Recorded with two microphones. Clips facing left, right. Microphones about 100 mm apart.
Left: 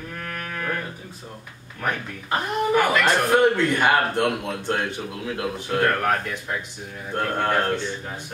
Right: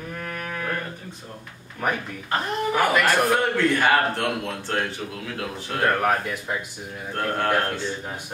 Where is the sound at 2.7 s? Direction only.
10° right (ahead or behind).